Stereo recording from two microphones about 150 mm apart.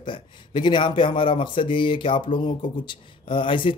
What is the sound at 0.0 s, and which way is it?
Speech, 30° left (ahead or behind).